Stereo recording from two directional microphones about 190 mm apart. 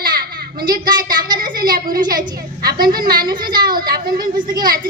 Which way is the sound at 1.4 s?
50° right (ahead or behind).